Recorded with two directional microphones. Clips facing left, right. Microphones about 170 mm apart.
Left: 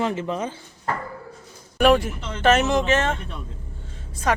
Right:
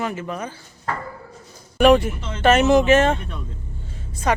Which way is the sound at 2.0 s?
Centre (ahead or behind).